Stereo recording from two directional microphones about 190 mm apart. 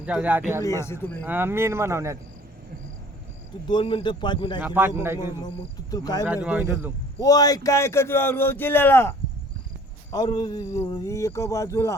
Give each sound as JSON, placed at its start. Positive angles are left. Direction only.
{"t": 0.0, "sound": "speech", "side_deg": -5}
{"t": 0.6, "sound": "speech", "side_deg": 15}
{"t": 1.2, "sound": "speech", "side_deg": -10}
{"t": 3.7, "sound": "speech", "side_deg": 25}
{"t": 4.6, "sound": "speech", "side_deg": -10}
{"t": 5.9, "sound": "speech", "side_deg": 20}
{"t": 6.2, "sound": "speech", "side_deg": -5}
{"t": 7.2, "sound": "speech", "side_deg": 20}